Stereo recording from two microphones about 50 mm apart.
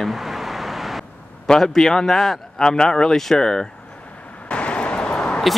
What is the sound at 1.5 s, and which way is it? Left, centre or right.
A man's voice, centre.